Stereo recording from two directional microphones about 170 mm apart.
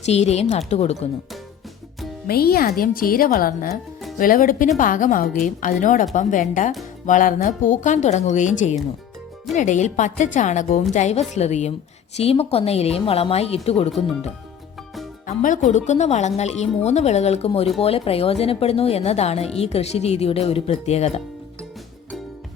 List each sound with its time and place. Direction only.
0.0 s a woman's voice: 40° left (ahead or behind)
2.2 s a woman's voice: 65° left (ahead or behind); by 13.9 s 35° left (ahead or behind)
15.3 s a woman's voice: 50° left (ahead or behind)